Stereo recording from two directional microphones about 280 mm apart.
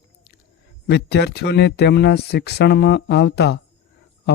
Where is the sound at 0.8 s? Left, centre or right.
Left.